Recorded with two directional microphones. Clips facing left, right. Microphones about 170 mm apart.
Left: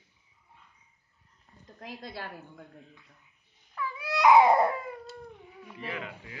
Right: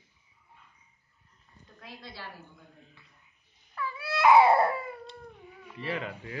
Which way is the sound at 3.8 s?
15° left (ahead or behind).